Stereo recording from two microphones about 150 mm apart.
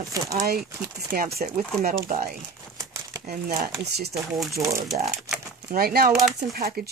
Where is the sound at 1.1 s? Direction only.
60° right (ahead or behind).